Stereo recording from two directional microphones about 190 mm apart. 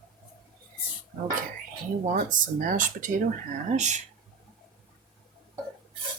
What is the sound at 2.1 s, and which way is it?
Speech, 45° right (ahead or behind).